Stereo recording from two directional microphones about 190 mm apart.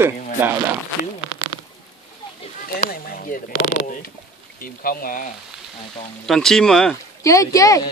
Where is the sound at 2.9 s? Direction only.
50° left (ahead or behind).